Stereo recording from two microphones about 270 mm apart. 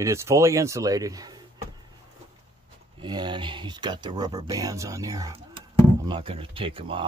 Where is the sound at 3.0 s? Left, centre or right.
Centre.